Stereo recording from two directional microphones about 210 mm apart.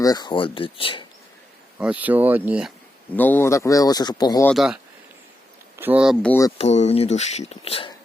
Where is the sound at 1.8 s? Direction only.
5° right (ahead or behind).